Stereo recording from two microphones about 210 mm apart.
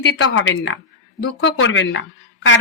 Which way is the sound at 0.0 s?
60° left (ahead or behind).